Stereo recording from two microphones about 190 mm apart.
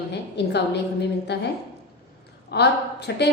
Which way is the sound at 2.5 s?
60° left (ahead or behind).